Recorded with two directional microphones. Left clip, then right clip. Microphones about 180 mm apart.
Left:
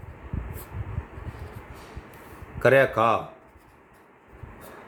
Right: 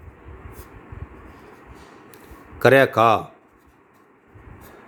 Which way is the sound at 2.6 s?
50° right (ahead or behind).